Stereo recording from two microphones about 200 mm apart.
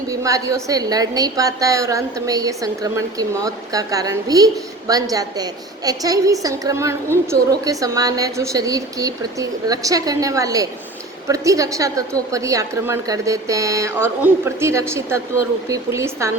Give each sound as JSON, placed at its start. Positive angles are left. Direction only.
{"t": 0.1, "sound": "a woman's voice", "side_deg": -15}